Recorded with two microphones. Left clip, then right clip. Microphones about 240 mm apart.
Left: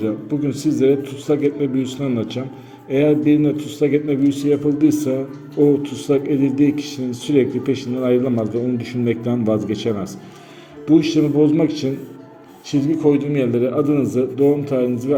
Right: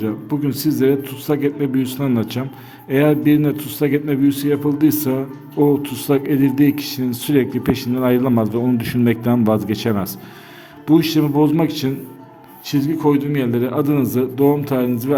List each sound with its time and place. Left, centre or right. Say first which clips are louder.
0.0 s a man's voice: even; right